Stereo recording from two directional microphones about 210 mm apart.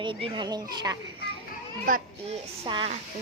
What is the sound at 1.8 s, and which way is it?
Speech, 40° right (ahead or behind).